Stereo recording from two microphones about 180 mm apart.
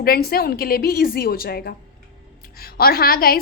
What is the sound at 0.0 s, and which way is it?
A woman's voice, 55° left (ahead or behind).